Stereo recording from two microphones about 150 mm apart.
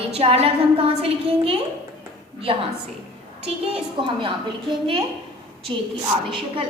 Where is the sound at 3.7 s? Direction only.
35° right (ahead or behind).